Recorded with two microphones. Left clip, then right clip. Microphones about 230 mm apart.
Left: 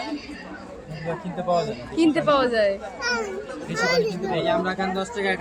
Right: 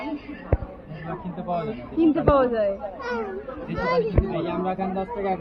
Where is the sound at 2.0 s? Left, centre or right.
Centre.